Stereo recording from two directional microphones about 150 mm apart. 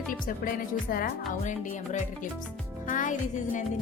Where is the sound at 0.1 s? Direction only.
70° left (ahead or behind).